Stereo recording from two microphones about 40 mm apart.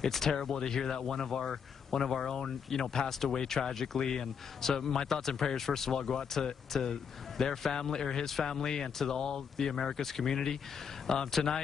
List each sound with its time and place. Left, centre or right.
0.0 s speech: centre